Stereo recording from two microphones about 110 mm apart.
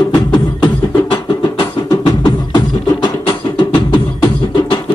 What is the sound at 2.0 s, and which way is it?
Beatboxing, 45° left (ahead or behind).